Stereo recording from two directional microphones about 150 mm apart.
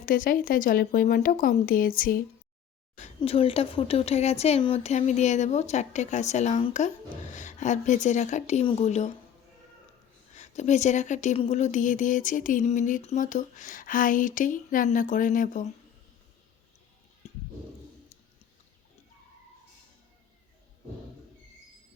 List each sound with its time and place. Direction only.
0.0 s speech: 65° left (ahead or behind)
3.2 s a woman's voice: 40° left (ahead or behind)
10.3 s speech: 50° left (ahead or behind)
17.2 s a sound: 50° left (ahead or behind)